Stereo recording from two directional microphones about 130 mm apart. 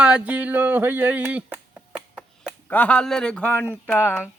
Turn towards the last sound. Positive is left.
turn(degrees=15)  # may be behind; listen again after turning